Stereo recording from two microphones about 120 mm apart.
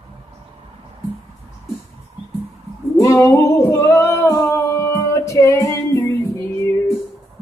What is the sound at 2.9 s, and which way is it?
Singing, 20° left (ahead or behind).